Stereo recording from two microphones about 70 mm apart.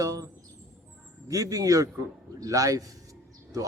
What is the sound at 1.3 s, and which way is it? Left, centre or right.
Speech, right.